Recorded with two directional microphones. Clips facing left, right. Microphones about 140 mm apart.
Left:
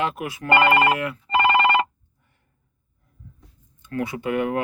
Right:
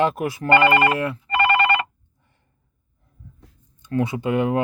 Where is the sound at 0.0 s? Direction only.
35° right (ahead or behind).